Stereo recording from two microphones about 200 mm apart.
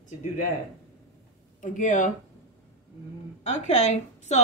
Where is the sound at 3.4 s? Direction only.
35° left (ahead or behind).